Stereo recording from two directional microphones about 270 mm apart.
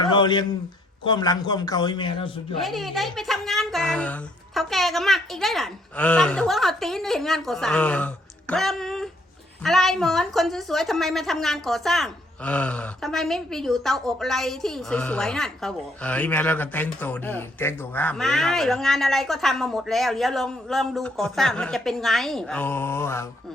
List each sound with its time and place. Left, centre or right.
0.0 s a sound: centre
1.0 s speech: centre
2.6 s a woman's voice: centre